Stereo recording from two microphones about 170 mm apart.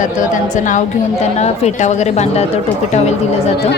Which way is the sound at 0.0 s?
50° left (ahead or behind).